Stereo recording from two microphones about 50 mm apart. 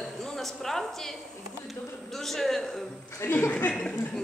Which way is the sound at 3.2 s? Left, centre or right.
Left.